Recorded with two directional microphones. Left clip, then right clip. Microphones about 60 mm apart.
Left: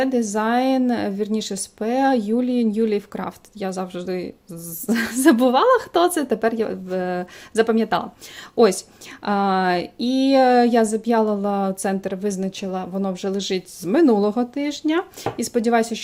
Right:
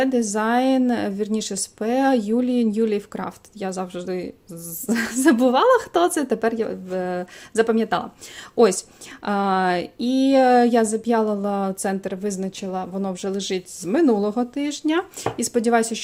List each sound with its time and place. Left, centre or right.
0.0 s speech: centre
6.5 s speech: left
14.5 s speech: centre